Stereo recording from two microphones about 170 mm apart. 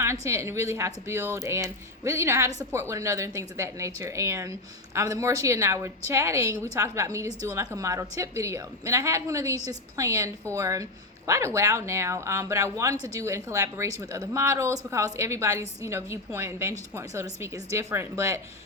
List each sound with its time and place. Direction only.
0.0 s a woman's voice: 15° right (ahead or behind)